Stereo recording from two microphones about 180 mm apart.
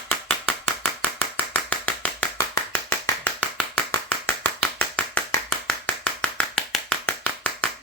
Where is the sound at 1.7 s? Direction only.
10° left (ahead or behind).